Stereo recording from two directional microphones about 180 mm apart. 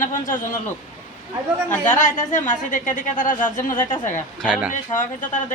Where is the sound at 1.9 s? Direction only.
45° left (ahead or behind).